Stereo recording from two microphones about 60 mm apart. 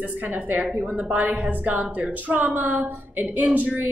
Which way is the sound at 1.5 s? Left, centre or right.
Right.